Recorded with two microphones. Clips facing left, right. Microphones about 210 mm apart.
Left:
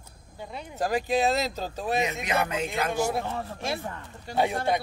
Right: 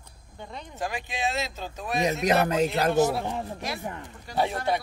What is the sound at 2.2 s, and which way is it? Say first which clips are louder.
Speech: right 6 dB; 40° right (ahead or behind).